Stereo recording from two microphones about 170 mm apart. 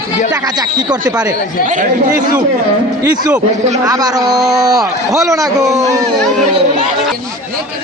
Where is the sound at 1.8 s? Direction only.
55° right (ahead or behind).